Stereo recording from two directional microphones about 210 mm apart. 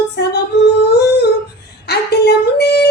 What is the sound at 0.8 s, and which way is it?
Humming, 50° left (ahead or behind).